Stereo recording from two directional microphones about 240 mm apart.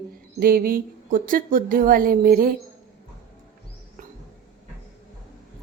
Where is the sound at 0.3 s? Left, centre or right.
Right.